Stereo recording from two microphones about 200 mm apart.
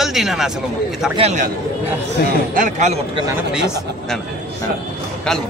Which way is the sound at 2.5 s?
40° right (ahead or behind).